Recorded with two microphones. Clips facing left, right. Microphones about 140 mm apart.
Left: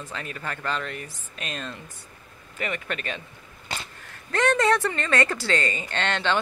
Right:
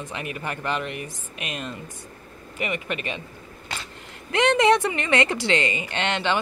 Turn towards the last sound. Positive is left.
turn(degrees=-10)  # may be behind; listen again after turning